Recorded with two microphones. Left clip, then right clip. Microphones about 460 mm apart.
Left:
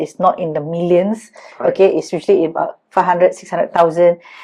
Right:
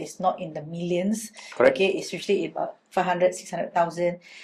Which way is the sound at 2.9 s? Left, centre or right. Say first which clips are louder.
Left 10 dB; left.